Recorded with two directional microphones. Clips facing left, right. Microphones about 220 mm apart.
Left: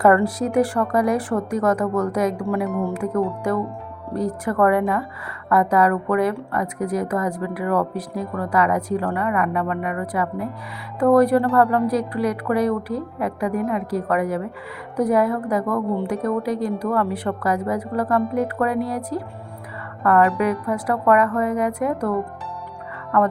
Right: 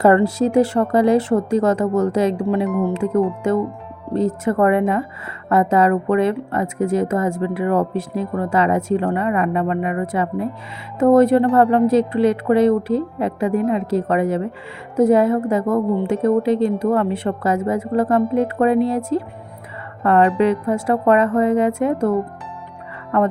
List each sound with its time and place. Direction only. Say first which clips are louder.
0.0 s a woman's voice: right 3 dB; 25° right (ahead or behind)